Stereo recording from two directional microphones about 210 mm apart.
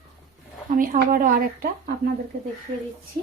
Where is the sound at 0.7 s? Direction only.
40° right (ahead or behind).